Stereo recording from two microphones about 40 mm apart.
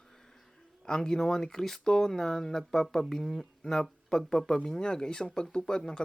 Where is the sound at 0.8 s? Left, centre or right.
Centre.